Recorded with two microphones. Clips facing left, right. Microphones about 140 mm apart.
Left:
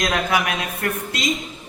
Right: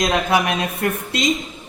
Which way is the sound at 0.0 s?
25° right (ahead or behind).